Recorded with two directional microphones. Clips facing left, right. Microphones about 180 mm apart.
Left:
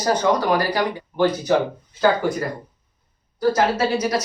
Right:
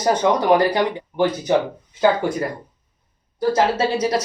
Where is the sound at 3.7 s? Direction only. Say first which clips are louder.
Right 1 dB; 30° right (ahead or behind).